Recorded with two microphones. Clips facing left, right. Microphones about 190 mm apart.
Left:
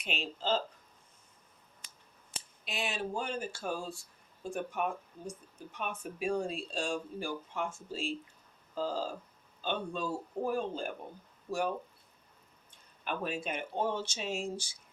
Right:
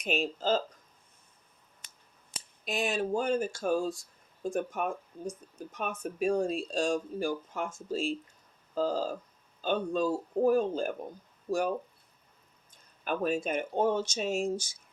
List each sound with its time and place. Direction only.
0.0 s speech: 45° right (ahead or behind)
2.6 s speech: 45° right (ahead or behind)
13.1 s speech: 45° right (ahead or behind)